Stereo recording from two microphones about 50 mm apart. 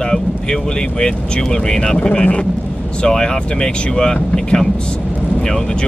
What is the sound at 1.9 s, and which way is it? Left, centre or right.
Speech, left.